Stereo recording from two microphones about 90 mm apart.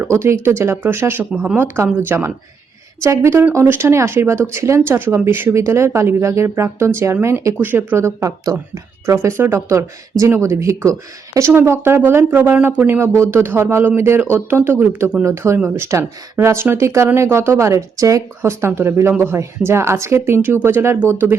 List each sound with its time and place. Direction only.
0.0 s speech: 30° right (ahead or behind)
1.3 s speech: 10° right (ahead or behind)
1.5 s speech: 25° right (ahead or behind)